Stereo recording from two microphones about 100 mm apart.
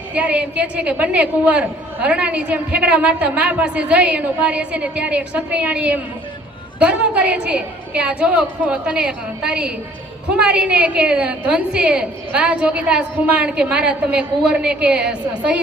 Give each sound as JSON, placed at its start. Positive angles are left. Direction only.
{"t": 0.1, "sound": "a woman's voice", "side_deg": -15}